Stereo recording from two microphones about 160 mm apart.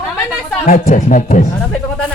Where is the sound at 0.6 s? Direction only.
55° left (ahead or behind).